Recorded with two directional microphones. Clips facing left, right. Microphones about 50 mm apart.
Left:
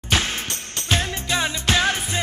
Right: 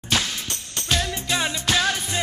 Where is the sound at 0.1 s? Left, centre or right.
Left.